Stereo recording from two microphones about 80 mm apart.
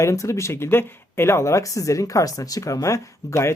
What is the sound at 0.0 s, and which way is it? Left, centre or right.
Speech, left.